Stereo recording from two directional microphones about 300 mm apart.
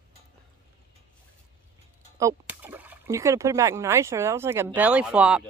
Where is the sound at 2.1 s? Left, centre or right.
Centre.